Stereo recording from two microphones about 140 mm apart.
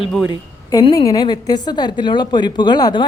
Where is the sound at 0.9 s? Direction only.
25° left (ahead or behind).